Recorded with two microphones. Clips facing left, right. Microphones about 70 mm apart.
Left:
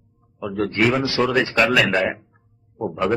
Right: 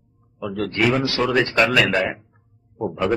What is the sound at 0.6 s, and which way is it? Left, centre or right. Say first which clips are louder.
Speech: left 1 dB; left.